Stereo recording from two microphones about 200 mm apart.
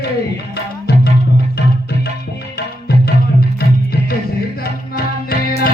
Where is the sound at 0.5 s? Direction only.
55° left (ahead or behind).